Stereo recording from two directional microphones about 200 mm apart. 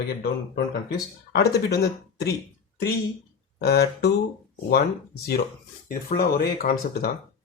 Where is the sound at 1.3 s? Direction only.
55° left (ahead or behind).